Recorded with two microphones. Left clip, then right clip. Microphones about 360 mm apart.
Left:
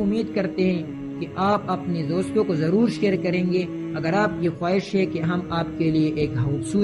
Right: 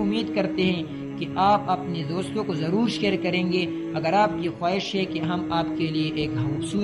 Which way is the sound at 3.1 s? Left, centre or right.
Right.